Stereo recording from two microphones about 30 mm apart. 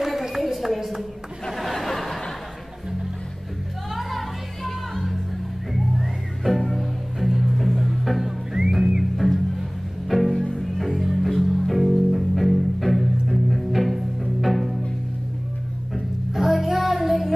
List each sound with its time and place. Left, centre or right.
0.0 s a sound: centre
4.6 s music: centre
8.2 s music: centre
9.1 s music: centre
16.3 s music: centre